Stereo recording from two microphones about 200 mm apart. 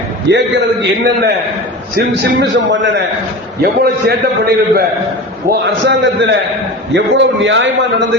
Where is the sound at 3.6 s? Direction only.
55° right (ahead or behind).